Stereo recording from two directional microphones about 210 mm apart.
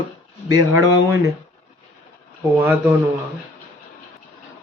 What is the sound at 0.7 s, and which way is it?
Speech, 15° right (ahead or behind).